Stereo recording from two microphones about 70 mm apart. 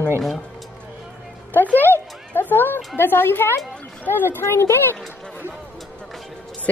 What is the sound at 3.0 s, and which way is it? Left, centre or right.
Speech, left.